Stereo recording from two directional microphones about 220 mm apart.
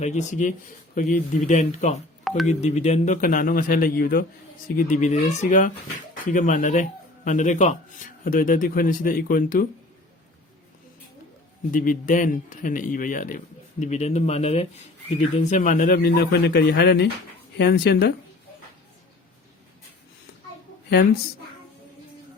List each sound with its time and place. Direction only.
0.0 s speech: 30° left (ahead or behind)
11.7 s speech: 40° left (ahead or behind)